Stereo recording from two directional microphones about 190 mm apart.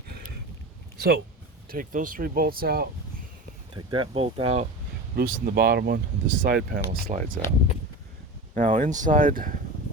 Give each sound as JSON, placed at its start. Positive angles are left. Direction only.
{"t": 0.9, "sound": "speech", "side_deg": -55}
{"t": 1.6, "sound": "speech", "side_deg": -45}
{"t": 3.8, "sound": "speech", "side_deg": -25}
{"t": 5.1, "sound": "speech", "side_deg": -50}
{"t": 8.5, "sound": "speech", "side_deg": -45}